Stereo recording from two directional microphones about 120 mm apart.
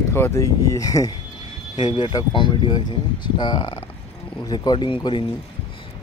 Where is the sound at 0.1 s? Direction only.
20° left (ahead or behind); by 5.2 s 45° left (ahead or behind).